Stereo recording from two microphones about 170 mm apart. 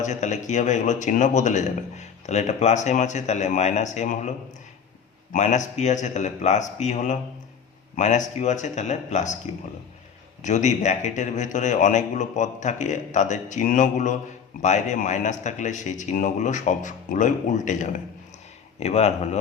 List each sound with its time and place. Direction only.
0.0 s a man's voice: 45° left (ahead or behind)
5.3 s a man's voice: 45° left (ahead or behind)
10.4 s a man's voice: 45° left (ahead or behind)